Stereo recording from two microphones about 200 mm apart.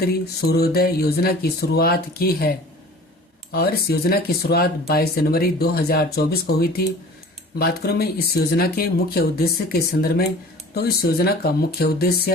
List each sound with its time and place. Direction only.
0.0 s speech: 50° left (ahead or behind)